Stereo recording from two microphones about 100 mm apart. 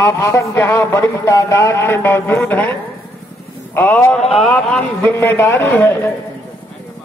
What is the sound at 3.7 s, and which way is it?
Speech, 20° left (ahead or behind).